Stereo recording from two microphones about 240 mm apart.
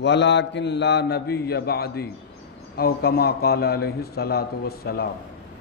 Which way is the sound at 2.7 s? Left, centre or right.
Left.